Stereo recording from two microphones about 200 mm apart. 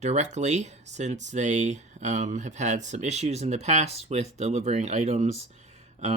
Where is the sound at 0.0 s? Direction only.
35° right (ahead or behind).